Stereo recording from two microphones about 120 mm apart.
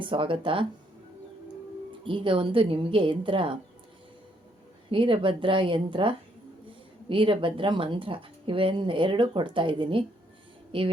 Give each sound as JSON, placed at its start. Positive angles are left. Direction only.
{"t": 0.0, "sound": "speech", "side_deg": -45}
{"t": 2.0, "sound": "speech", "side_deg": -45}
{"t": 4.9, "sound": "speech", "side_deg": -45}